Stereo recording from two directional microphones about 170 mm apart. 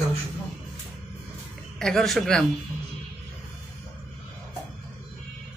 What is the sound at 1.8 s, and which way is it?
Speech, centre (ahead or behind).